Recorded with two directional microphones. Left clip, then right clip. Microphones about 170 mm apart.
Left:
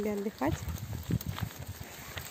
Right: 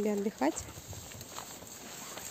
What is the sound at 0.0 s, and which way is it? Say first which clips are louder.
Speech: right 1 dB; 15° right (ahead or behind).